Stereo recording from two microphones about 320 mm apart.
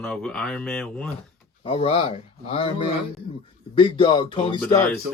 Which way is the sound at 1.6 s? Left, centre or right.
Centre.